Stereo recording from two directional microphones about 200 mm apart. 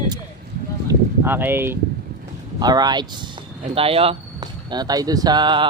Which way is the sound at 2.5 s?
20° right (ahead or behind).